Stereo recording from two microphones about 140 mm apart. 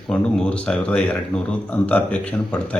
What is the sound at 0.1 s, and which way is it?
Speech, 5° left (ahead or behind).